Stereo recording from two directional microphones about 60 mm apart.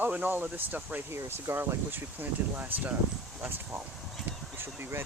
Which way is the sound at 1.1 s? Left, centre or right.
Right.